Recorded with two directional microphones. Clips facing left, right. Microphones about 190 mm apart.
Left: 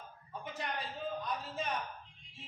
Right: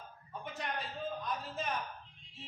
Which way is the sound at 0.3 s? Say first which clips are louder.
Even; centre (ahead or behind).